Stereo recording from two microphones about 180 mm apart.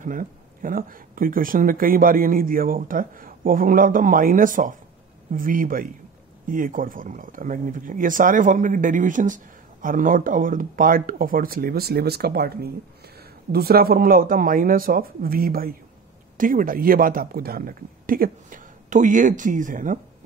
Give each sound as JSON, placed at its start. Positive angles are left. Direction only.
{"t": 0.0, "sound": "speech", "side_deg": -50}